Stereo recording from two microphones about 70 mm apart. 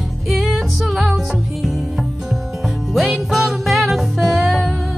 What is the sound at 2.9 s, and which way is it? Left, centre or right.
Music, centre.